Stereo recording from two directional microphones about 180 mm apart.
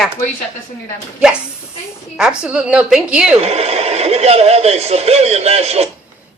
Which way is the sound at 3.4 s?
35° right (ahead or behind).